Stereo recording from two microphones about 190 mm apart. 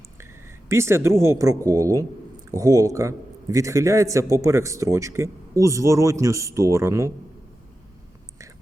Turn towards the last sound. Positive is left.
turn(degrees=-15)  # may be behind; listen again after turning